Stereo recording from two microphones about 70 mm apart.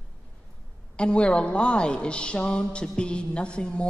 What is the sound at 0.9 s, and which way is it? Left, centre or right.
A man's voice, centre.